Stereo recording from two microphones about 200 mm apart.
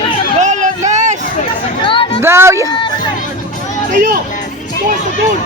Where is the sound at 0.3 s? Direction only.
35° right (ahead or behind).